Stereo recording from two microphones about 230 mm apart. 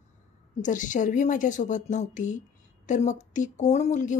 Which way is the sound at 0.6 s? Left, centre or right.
Left.